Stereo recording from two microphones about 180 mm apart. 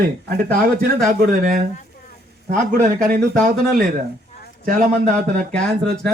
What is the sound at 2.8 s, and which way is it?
Speech, 50° right (ahead or behind).